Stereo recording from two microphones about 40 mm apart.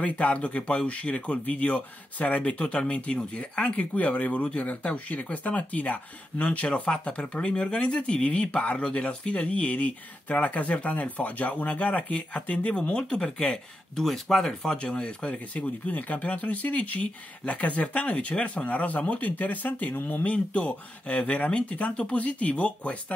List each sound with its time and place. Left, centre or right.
0.0 s speech: left; by 14.0 s centre
14.0 s speech: centre
14.8 s speech: left
15.5 s speech: left
20.2 s speech: left